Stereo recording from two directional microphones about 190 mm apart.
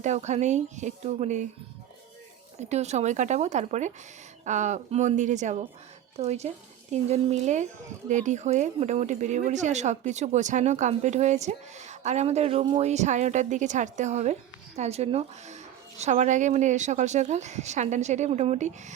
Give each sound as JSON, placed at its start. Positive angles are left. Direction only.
{"t": 0.0, "sound": "speech", "side_deg": -35}
{"t": 2.6, "sound": "speech", "side_deg": -35}